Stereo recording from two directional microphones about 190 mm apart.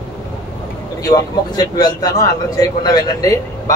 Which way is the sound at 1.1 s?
20° left (ahead or behind).